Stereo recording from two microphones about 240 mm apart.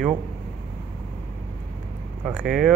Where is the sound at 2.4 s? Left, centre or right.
Centre.